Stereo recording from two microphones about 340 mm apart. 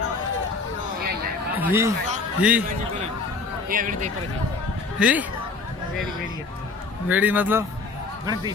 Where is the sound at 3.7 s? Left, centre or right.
Right.